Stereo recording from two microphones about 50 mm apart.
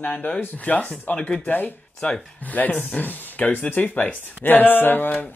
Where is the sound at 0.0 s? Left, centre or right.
Left.